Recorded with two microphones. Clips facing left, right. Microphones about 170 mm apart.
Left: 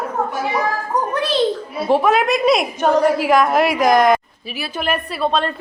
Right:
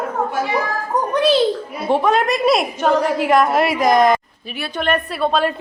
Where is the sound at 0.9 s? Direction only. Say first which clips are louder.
Right 4 dB; centre (ahead or behind).